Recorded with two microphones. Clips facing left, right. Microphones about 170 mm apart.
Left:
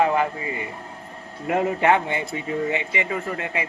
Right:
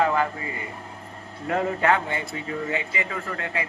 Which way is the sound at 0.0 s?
20° left (ahead or behind).